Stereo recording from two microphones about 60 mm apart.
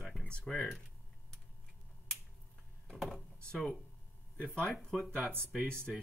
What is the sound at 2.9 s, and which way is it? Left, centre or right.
Speech, centre.